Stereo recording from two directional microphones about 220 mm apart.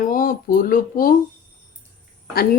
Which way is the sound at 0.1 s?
40° left (ahead or behind).